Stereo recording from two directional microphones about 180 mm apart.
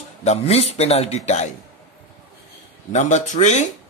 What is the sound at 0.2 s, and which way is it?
A man's voice, 35° left (ahead or behind).